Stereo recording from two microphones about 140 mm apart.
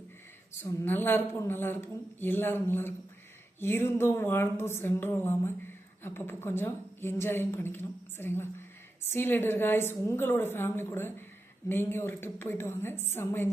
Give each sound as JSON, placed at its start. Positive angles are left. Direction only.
{"t": 0.6, "sound": "a woman's voice", "side_deg": 20}